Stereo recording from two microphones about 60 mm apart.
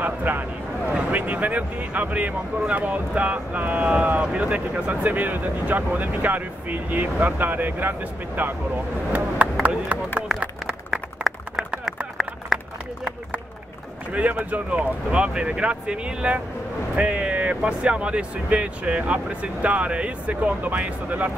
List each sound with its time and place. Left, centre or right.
0.0 s a sound: right
0.9 s speech: right
10.9 s a sound: centre
14.1 s speech: right
16.9 s vehicle: right
17.6 s speech: centre